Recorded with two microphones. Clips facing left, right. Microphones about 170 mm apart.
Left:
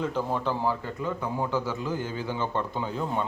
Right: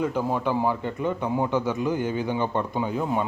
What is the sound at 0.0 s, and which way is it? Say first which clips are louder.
A man's voice: right 3 dB; 15° right (ahead or behind).